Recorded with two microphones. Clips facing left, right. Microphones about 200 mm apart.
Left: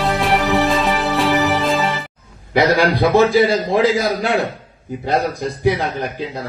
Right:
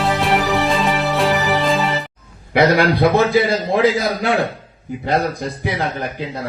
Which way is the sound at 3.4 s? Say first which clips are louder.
Left 1 dB; 60° right (ahead or behind).